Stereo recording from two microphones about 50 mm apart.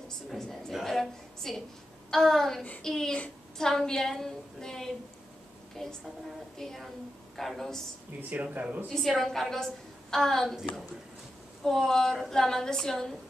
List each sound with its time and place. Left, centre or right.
0.3 s a woman's voice: centre
8.2 s speech: right
8.8 s a woman's voice: centre
11.6 s a woman's voice: centre